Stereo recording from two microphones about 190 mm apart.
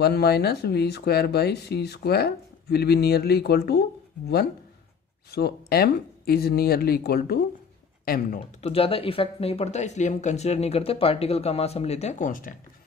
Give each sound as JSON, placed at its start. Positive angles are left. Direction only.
{"t": 0.0, "sound": "speech", "side_deg": 60}
{"t": 5.3, "sound": "speech", "side_deg": 55}
{"t": 8.5, "sound": "speech", "side_deg": 30}